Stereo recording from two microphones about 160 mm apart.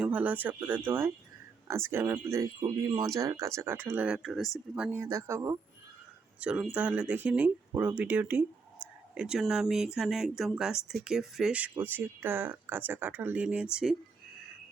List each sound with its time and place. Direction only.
0.0 s speech: 10° right (ahead or behind)
6.4 s speech: 5° right (ahead or behind)